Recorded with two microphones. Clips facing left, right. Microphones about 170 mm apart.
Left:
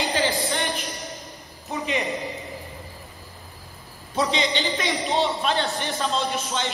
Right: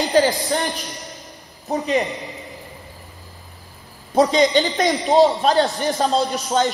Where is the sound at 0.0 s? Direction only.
40° right (ahead or behind).